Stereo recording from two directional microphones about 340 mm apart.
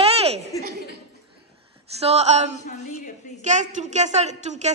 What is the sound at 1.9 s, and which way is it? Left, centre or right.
A woman's voice, centre.